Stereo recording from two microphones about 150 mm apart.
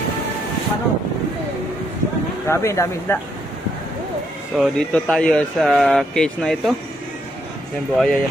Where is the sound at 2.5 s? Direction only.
20° left (ahead or behind).